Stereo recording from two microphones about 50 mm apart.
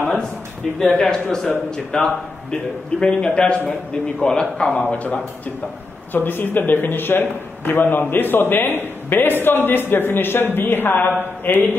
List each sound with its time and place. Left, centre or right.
0.9 s a man's voice: centre
4.8 s a man's voice: left
6.1 s a man's voice: left